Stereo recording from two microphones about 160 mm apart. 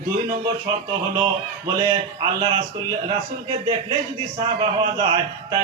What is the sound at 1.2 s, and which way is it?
Speech, 20° right (ahead or behind).